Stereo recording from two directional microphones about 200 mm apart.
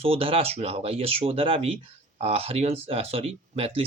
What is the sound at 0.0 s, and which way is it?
Speech, 30° right (ahead or behind).